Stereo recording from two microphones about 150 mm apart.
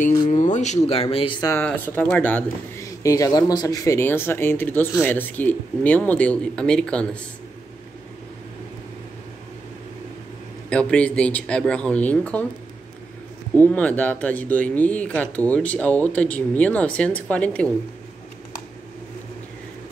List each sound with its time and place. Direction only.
0.3 s speech: 55° left (ahead or behind); by 1.5 s 35° left (ahead or behind)
1.5 s speech: 10° left (ahead or behind)
2.8 s a sound: 20° left (ahead or behind)
3.3 s speech: 25° left (ahead or behind); by 7.1 s 5° left (ahead or behind)
10.7 s speech: 10° left (ahead or behind)
13.6 s speech: 10° left (ahead or behind)